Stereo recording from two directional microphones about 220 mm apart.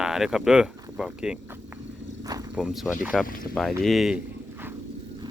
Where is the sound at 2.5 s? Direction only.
5° right (ahead or behind).